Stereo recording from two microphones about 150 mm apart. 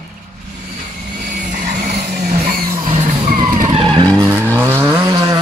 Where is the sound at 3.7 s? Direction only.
35° right (ahead or behind).